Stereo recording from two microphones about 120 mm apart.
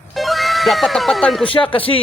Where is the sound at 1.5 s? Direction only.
45° left (ahead or behind).